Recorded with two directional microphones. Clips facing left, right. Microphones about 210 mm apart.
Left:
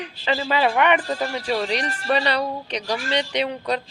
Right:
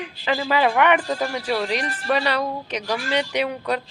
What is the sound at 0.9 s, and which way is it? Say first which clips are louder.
Speech: right 1 dB; 10° right (ahead or behind).